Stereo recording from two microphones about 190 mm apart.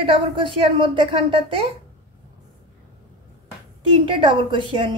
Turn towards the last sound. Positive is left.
turn(degrees=-25)  # may be behind; listen again after turning